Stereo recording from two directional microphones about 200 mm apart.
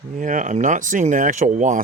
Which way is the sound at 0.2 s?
40° right (ahead or behind).